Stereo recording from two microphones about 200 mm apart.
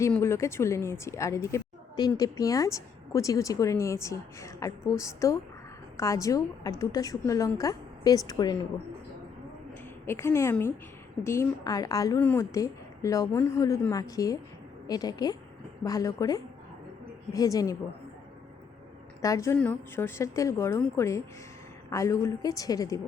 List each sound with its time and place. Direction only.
0.0 s speech: 15° left (ahead or behind)
10.1 s a woman's voice: 15° left (ahead or behind)
19.2 s speech: 15° left (ahead or behind)